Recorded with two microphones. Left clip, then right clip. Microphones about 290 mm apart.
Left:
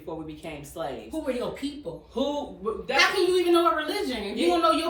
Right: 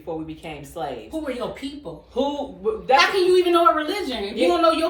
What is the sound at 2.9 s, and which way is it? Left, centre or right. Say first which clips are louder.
A woman's voice: right 5 dB; centre.